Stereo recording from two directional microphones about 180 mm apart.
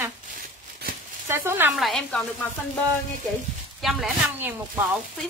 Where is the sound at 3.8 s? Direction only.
Centre (ahead or behind).